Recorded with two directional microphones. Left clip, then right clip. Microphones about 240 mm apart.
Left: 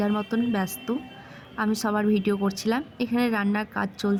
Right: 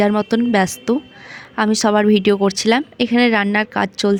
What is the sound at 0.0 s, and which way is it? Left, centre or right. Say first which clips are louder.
A woman's voice: right 10 dB; right.